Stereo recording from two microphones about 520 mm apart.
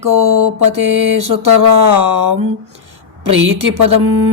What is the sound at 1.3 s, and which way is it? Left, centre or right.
Speech, right.